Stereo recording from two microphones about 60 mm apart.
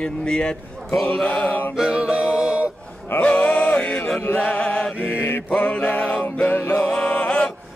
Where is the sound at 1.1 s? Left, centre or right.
Left.